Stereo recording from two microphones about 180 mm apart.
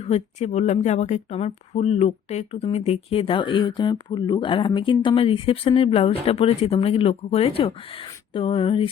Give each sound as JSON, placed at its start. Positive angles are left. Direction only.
{"t": 0.0, "sound": "speech", "side_deg": 40}